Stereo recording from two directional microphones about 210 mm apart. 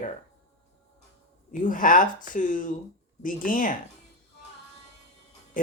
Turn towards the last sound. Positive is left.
turn(degrees=40)  # may be behind; listen again after turning